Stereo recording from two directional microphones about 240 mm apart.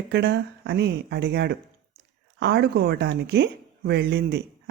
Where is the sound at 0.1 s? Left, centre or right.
Right.